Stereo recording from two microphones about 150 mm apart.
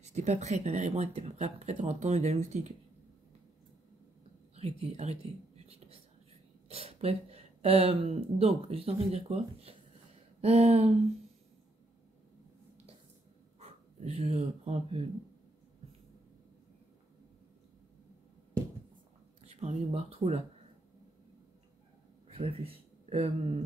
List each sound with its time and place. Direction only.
0.0 s speech: 50° right (ahead or behind)
4.6 s speech: 45° right (ahead or behind)
13.6 s speech: 45° right (ahead or behind)
19.5 s speech: 45° right (ahead or behind)
22.3 s speech: 40° right (ahead or behind)